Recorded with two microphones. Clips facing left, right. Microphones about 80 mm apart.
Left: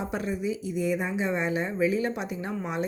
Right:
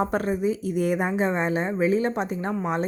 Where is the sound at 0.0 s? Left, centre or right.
Right.